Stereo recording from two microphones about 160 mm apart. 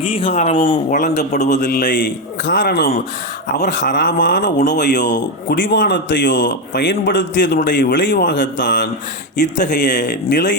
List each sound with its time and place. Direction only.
0.0 s speech: 35° left (ahead or behind)
0.9 s a man's voice: 55° left (ahead or behind)
2.6 s speech: 85° left
9.8 s speech: 50° left (ahead or behind)
10.1 s speech: 90° left